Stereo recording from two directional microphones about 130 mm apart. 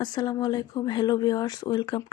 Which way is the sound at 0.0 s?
30° left (ahead or behind).